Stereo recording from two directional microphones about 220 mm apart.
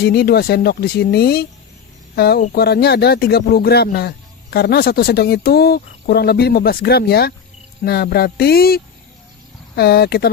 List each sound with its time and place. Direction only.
0.0 s speech: 45° left (ahead or behind)